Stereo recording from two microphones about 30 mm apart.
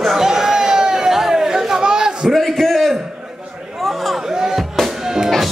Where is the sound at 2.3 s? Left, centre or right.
Centre.